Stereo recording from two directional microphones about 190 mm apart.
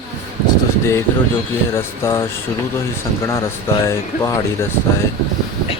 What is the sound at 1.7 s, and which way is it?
Speech, 15° left (ahead or behind).